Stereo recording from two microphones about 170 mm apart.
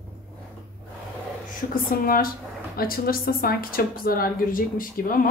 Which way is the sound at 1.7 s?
55° left (ahead or behind).